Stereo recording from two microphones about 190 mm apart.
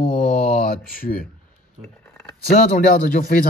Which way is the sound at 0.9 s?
50° left (ahead or behind).